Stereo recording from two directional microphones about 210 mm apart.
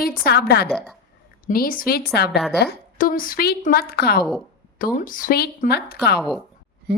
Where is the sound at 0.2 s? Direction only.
50° left (ahead or behind).